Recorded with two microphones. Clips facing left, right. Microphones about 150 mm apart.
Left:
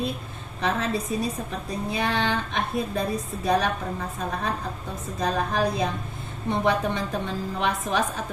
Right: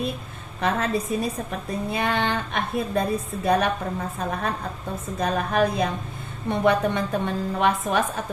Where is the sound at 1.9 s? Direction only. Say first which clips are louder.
Right 1 dB; 55° right (ahead or behind).